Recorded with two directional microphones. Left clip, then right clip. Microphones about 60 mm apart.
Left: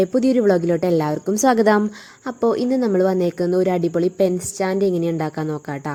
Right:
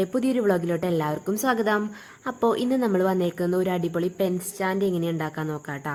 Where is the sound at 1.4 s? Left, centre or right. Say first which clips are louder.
Left 8 dB; left.